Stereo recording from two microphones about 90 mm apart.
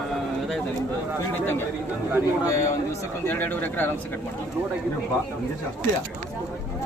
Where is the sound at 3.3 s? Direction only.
20° left (ahead or behind).